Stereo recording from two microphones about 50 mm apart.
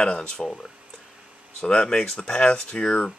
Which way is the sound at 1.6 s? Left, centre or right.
Centre.